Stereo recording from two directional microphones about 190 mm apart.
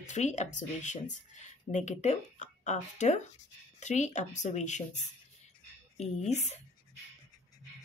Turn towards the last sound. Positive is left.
turn(degrees=35)  # may be behind; listen again after turning